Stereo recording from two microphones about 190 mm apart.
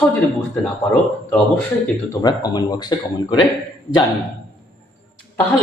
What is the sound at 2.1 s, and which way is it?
Speech, 20° left (ahead or behind).